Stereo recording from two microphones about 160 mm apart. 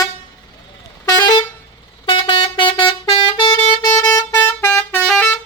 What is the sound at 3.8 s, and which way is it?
Vehicle horn, 20° left (ahead or behind).